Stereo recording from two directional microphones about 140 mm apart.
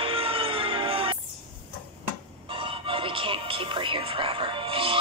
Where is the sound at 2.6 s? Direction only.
40° right (ahead or behind).